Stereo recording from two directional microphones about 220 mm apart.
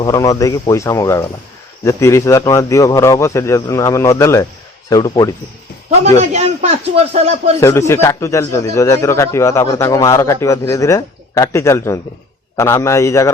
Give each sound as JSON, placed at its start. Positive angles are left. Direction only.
{"t": 0.0, "sound": "a man's voice", "side_deg": 15}
{"t": 6.1, "sound": "speech", "side_deg": -30}
{"t": 7.6, "sound": "a man's voice", "side_deg": 10}